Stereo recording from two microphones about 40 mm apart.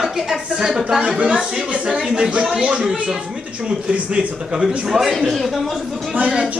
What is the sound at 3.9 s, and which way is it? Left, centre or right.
Speech, right.